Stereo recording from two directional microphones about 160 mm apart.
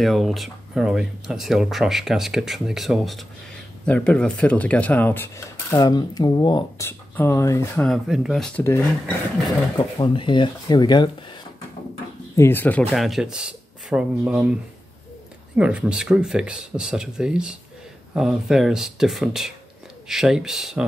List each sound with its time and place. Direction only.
0.0 s speech: centre (ahead or behind); by 6.6 s 25° left (ahead or behind)
6.8 s speech: 15° left (ahead or behind)
7.9 s speech: centre (ahead or behind)
9.8 s speech: 30° left (ahead or behind)
12.4 s speech: 15° left (ahead or behind)
12.9 s speech: centre (ahead or behind)
15.5 s speech: 5° right (ahead or behind)